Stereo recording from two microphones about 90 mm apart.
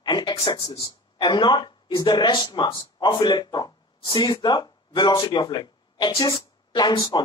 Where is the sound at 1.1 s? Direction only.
55° left (ahead or behind).